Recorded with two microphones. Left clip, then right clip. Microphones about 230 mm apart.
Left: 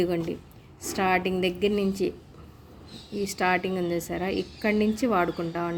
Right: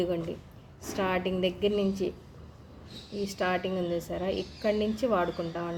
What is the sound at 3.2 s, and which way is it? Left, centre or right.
A woman's voice, left.